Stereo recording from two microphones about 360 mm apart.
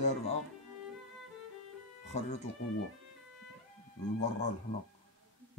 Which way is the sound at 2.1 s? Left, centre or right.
Centre.